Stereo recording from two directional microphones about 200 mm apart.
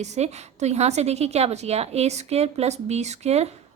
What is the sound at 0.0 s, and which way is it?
A woman's voice, 35° right (ahead or behind).